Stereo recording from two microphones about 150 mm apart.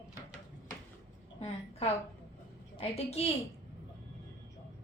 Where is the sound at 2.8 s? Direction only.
45° left (ahead or behind).